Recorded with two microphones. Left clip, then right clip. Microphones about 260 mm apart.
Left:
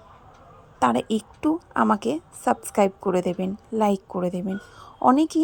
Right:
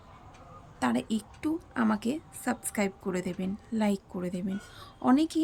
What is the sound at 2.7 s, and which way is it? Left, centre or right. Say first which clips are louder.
Speech: left 12 dB; left.